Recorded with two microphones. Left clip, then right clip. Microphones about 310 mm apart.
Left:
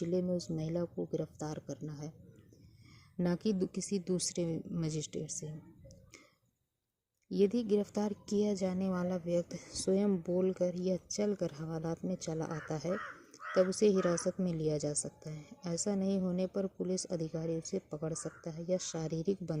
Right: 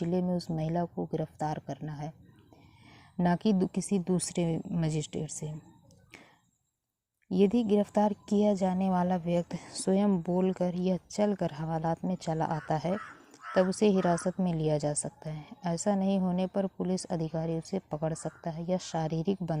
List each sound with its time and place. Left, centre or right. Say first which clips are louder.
0.0 s a woman's voice: right 2 dB; right
3.2 s a woman's voice: right 6 dB; right
7.3 s a woman's voice: right 4 dB; right
13.3 s crow: right 1 dB; right
13.7 s a woman's voice: right 3 dB; right